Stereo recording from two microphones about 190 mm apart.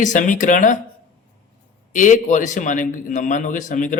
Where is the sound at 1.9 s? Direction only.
40° left (ahead or behind).